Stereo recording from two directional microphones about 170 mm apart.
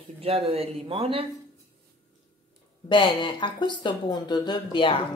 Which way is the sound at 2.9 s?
30° left (ahead or behind).